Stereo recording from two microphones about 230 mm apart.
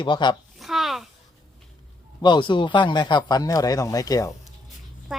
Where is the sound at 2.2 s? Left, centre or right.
Centre.